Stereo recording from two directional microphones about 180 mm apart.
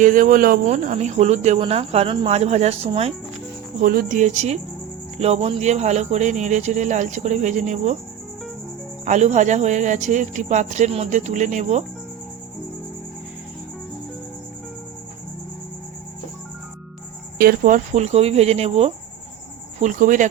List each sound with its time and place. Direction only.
0.0 s speech: 45° right (ahead or behind)
3.8 s speech: 50° right (ahead or behind)
9.0 s speech: 40° right (ahead or behind)
17.3 s speech: 55° right (ahead or behind); by 18.9 s 35° right (ahead or behind)
19.8 s speech: 45° right (ahead or behind)